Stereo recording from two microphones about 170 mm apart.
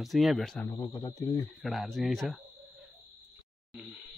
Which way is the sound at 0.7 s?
20° left (ahead or behind).